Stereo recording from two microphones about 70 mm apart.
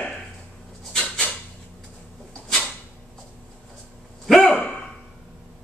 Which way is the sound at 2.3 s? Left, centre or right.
Centre.